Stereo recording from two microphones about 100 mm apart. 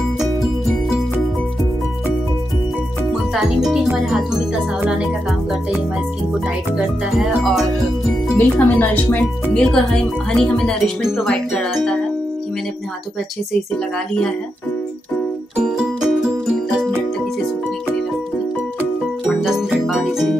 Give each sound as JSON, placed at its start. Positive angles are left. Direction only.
{"t": 3.1, "sound": "music", "side_deg": 0}
{"t": 3.9, "sound": "speech", "side_deg": -5}
{"t": 4.7, "sound": "music", "side_deg": -15}
{"t": 6.4, "sound": "speech", "side_deg": -5}
{"t": 8.4, "sound": "speech", "side_deg": 20}
{"t": 11.1, "sound": "speech", "side_deg": 0}
{"t": 11.5, "sound": "music", "side_deg": 5}
{"t": 13.9, "sound": "speech", "side_deg": 10}
{"t": 15.5, "sound": "music", "side_deg": -10}
{"t": 19.4, "sound": "music", "side_deg": -5}